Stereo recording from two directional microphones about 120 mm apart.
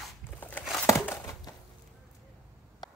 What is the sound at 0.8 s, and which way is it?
Crumpling, 20° left (ahead or behind).